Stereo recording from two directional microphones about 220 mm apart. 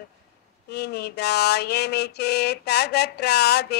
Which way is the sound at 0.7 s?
50° left (ahead or behind).